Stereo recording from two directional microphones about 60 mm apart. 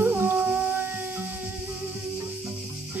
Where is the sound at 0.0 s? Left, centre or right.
Right.